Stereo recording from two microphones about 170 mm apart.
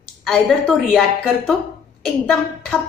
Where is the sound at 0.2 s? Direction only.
Centre (ahead or behind).